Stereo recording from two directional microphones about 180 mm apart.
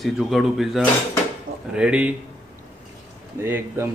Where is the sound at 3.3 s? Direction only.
15° right (ahead or behind).